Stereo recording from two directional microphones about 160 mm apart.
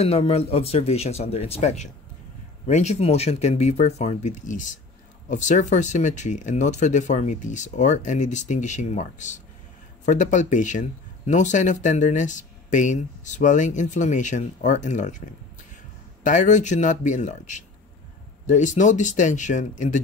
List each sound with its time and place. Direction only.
0.0 s speech: 40° left (ahead or behind)
16.3 s speech: 50° left (ahead or behind)